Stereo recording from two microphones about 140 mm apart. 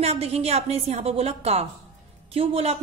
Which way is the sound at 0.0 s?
50° right (ahead or behind).